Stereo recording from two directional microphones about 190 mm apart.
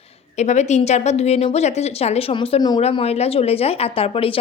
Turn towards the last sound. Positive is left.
turn(degrees=30)  # may be behind; listen again after turning